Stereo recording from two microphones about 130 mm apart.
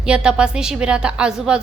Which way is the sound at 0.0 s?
5° right (ahead or behind).